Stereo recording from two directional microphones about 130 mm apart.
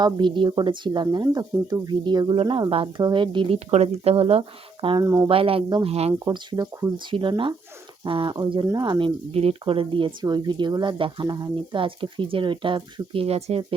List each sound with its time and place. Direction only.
0.0 s speech: 35° right (ahead or behind)
3.7 s speech: 55° right (ahead or behind)
4.9 s speech: 25° right (ahead or behind)
5.3 s speech: 45° right (ahead or behind)
6.2 s speech: 30° right (ahead or behind)
7.1 s speech: 40° right (ahead or behind)